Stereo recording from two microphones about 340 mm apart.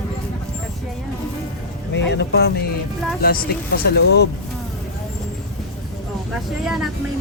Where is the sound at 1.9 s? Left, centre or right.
Left.